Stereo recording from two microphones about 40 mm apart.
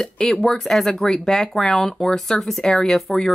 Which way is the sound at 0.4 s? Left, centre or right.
Centre.